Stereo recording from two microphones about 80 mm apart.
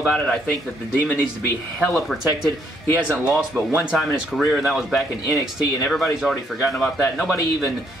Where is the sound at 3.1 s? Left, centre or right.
Centre.